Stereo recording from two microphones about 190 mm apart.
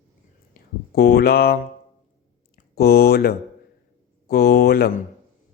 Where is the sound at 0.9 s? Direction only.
55° left (ahead or behind).